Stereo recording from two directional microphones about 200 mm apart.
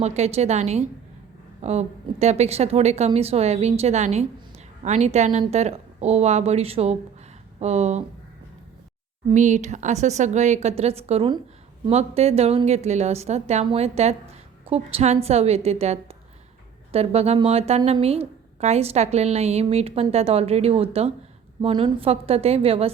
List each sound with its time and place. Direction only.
0.0 s a woman's voice: 35° right (ahead or behind)
9.3 s a woman's voice: 35° right (ahead or behind)